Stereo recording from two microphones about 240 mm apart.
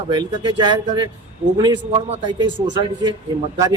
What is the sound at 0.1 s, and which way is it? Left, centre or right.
A man's voice, centre.